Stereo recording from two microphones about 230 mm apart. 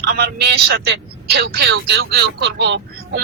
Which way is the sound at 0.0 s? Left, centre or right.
Right.